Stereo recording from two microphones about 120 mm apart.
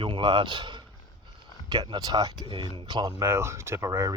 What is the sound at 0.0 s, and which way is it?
Speech, 40° right (ahead or behind).